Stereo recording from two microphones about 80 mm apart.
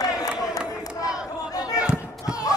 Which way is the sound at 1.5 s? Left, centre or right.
Left.